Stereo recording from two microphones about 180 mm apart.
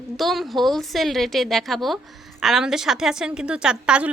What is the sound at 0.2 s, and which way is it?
A woman's voice, centre (ahead or behind).